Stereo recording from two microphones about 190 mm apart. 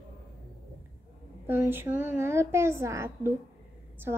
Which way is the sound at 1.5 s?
10° right (ahead or behind).